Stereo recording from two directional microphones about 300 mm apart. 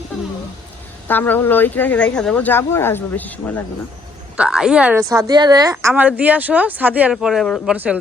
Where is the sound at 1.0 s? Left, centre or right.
Centre.